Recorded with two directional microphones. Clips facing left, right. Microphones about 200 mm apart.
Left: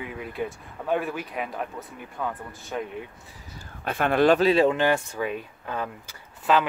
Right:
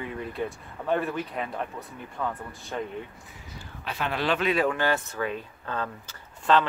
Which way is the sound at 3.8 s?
50° left (ahead or behind).